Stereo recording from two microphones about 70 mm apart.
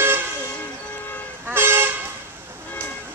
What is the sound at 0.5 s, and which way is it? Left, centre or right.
Train, left.